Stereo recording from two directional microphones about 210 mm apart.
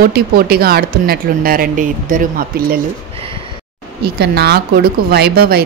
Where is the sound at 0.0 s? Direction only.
45° right (ahead or behind).